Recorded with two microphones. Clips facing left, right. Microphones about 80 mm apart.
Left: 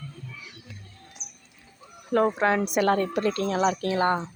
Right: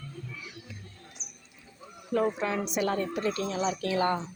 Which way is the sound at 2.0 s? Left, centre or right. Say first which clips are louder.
Left 6 dB; left.